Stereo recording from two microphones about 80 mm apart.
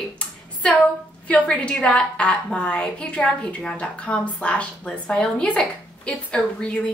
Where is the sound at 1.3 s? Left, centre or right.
Centre.